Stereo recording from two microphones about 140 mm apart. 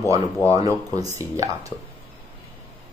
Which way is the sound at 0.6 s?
25° right (ahead or behind).